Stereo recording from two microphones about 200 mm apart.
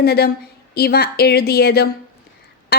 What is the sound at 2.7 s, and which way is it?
Duck, 55° left (ahead or behind).